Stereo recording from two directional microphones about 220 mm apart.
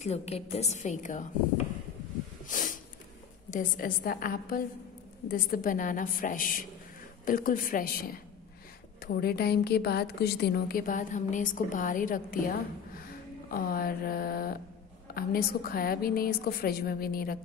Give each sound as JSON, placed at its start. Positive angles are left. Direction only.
{"t": 0.0, "sound": "a woman's voice", "side_deg": 30}
{"t": 2.4, "sound": "snort", "side_deg": 35}
{"t": 3.4, "sound": "a woman's voice", "side_deg": 35}